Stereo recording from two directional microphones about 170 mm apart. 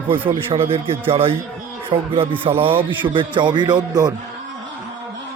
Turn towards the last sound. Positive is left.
turn(degrees=-25)  # may be behind; listen again after turning